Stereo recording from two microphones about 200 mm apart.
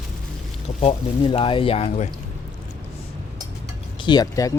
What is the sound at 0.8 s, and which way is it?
Speech, 30° left (ahead or behind).